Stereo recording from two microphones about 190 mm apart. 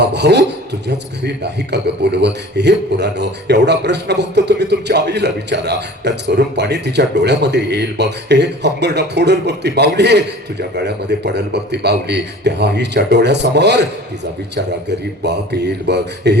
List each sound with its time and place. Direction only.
0.1 s rub: 65° right (ahead or behind)
1.7 s a man's voice: 60° right (ahead or behind)